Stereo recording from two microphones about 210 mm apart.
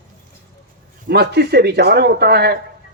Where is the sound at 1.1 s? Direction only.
50° right (ahead or behind).